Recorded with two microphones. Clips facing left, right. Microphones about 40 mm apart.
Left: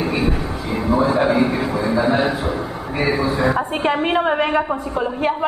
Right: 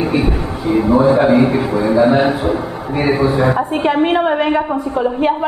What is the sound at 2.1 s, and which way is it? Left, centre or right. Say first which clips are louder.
A man's voice: right 5 dB; right.